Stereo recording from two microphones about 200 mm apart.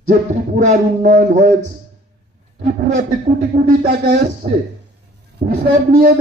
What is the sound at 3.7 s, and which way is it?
Speech, 50° right (ahead or behind).